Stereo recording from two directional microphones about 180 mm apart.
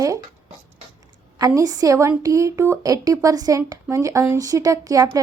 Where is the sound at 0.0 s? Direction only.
20° right (ahead or behind).